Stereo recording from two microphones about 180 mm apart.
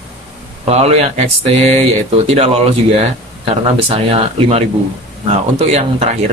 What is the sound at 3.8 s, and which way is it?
Speech, 35° right (ahead or behind).